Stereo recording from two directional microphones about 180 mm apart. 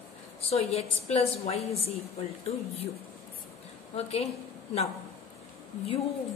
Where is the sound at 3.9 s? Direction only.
35° left (ahead or behind).